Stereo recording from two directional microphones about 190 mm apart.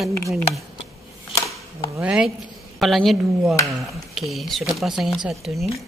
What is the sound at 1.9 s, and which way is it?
Speech, 5° right (ahead or behind).